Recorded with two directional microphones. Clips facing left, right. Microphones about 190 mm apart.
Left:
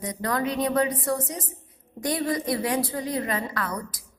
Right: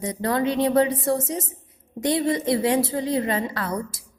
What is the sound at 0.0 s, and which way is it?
A woman's voice, 25° right (ahead or behind).